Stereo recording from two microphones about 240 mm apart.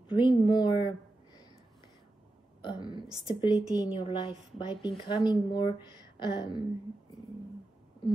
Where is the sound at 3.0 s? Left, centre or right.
Centre.